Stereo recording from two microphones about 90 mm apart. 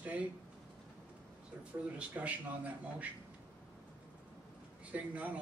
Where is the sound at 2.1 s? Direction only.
15° right (ahead or behind).